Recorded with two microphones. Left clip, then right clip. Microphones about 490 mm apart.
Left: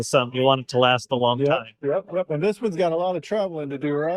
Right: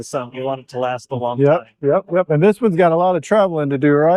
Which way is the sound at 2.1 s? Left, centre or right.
Right.